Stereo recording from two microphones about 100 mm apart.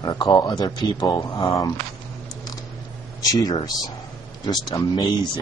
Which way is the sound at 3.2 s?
35° left (ahead or behind).